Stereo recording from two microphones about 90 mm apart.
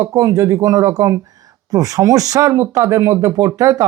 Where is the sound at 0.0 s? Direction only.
40° right (ahead or behind).